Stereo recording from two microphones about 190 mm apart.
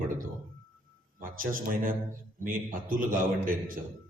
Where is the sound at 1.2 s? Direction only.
45° right (ahead or behind).